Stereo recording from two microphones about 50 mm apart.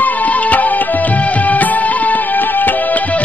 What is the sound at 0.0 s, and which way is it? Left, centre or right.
Music, left.